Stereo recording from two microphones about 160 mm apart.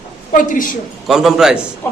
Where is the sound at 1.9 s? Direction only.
15° left (ahead or behind).